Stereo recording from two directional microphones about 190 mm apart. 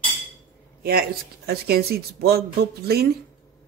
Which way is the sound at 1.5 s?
55° right (ahead or behind).